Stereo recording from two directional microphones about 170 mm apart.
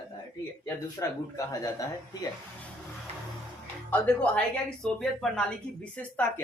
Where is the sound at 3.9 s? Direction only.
5° left (ahead or behind).